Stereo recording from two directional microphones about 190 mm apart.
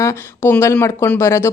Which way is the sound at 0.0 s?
15° left (ahead or behind).